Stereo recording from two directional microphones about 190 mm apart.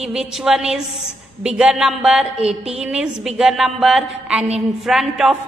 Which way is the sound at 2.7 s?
5° right (ahead or behind).